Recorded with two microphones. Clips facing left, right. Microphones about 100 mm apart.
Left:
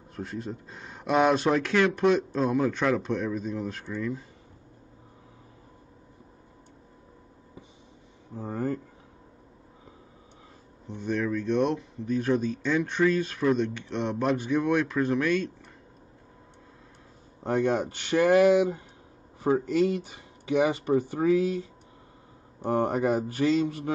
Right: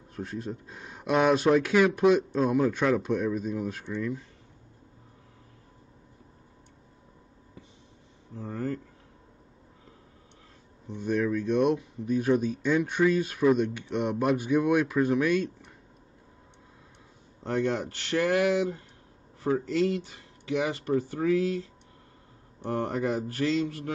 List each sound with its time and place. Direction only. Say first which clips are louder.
0.1 s speech: even; centre (ahead or behind)
8.4 s speech: left 2 dB; 15° left (ahead or behind)
10.9 s speech: right 1 dB; 5° right (ahead or behind)
17.4 s speech: left 3 dB; 15° left (ahead or behind)
22.7 s speech: left 4 dB; 20° left (ahead or behind)